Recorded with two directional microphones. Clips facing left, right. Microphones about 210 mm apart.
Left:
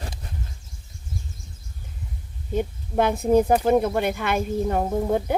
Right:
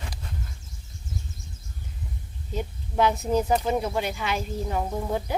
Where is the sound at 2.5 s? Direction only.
55° left (ahead or behind).